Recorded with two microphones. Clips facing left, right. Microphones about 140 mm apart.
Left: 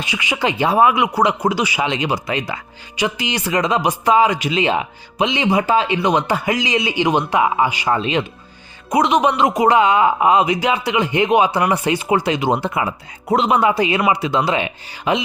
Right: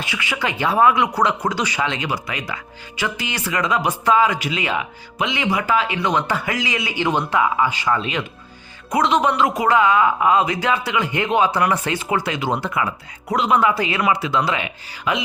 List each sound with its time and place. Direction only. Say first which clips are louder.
0.0 s speech: left 4 dB; 20° left (ahead or behind)